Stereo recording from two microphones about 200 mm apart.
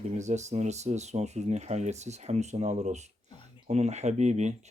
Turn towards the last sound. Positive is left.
turn(degrees=-35)  # may be behind; listen again after turning